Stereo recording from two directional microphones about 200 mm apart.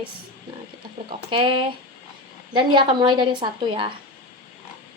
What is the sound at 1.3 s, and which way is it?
A woman's voice, 25° right (ahead or behind).